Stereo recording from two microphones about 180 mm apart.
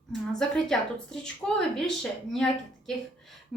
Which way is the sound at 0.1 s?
5° left (ahead or behind).